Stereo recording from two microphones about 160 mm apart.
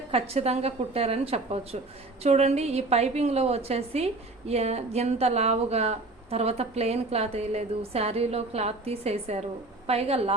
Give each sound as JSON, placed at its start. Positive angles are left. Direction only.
{"t": 0.1, "sound": "a woman's voice", "side_deg": -40}